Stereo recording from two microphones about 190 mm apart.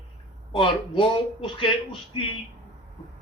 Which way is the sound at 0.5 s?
30° left (ahead or behind).